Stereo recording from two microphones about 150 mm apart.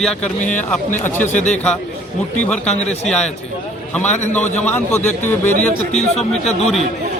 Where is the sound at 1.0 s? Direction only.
15° left (ahead or behind).